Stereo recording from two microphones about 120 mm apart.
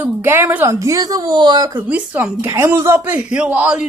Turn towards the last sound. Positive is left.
turn(degrees=-10)  # may be behind; listen again after turning